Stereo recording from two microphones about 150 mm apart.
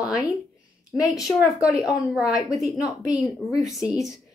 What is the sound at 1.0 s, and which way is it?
Speech, 25° left (ahead or behind).